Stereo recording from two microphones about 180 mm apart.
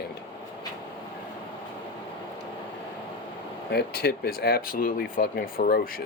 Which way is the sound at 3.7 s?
65° left (ahead or behind).